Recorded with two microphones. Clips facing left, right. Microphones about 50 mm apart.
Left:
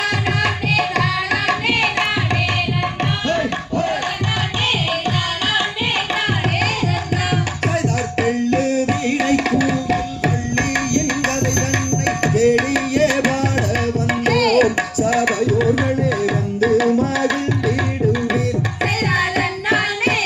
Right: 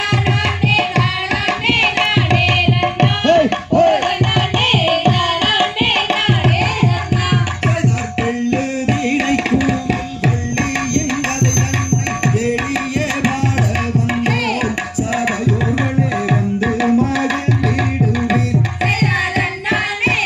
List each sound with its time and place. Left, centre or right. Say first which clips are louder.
0.7 s tabla: right 3 dB; right
8.2 s music: even; right
12.2 s tabla: left 5 dB; right
18.3 s music: right 2 dB; right